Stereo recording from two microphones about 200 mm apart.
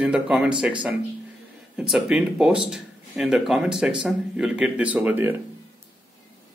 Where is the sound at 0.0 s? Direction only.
5° right (ahead or behind).